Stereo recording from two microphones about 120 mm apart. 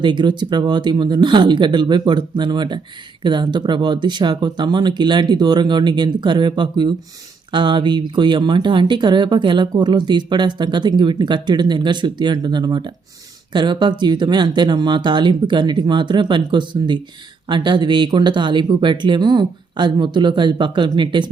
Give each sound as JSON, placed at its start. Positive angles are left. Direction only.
{"t": 0.0, "sound": "speech", "side_deg": -40}